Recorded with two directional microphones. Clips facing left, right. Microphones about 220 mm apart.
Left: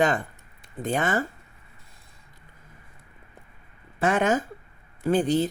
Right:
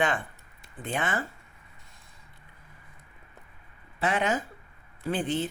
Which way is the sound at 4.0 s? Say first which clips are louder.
Left 5 dB; 45° left (ahead or behind).